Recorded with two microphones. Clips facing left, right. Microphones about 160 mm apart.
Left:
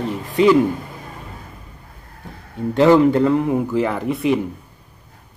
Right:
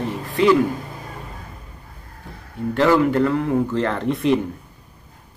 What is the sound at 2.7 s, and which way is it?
A man's voice, 20° left (ahead or behind).